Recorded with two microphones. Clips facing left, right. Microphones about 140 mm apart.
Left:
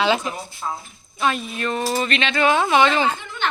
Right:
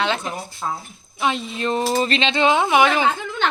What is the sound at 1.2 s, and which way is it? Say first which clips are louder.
Speech: even; 20° right (ahead or behind).